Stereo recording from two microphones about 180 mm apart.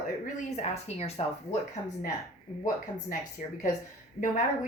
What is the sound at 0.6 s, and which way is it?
Speech, 35° left (ahead or behind).